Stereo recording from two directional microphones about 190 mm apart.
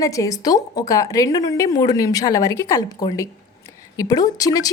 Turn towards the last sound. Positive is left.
turn(degrees=20)  # may be behind; listen again after turning